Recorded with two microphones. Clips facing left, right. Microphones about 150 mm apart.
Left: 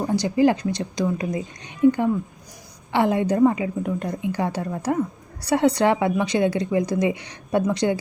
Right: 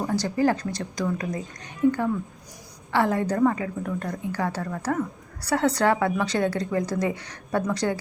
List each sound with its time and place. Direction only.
0.1 s a woman's voice: 15° left (ahead or behind)